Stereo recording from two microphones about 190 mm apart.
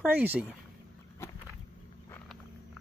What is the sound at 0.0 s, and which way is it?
Speech, 10° right (ahead or behind).